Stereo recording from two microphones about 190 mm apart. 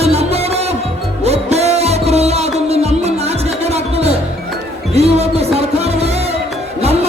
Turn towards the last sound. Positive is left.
turn(degrees=-35)  # may be behind; listen again after turning